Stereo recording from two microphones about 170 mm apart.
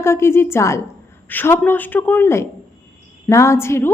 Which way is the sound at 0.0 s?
15° left (ahead or behind).